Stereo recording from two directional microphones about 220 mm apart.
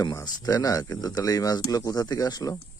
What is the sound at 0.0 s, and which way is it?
Speech, 20° left (ahead or behind).